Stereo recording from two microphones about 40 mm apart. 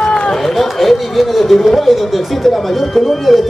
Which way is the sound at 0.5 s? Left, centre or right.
Centre.